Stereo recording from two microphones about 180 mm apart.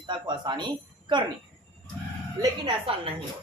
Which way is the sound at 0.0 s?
25° right (ahead or behind).